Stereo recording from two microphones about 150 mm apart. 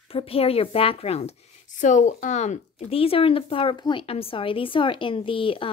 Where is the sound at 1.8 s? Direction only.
55° left (ahead or behind).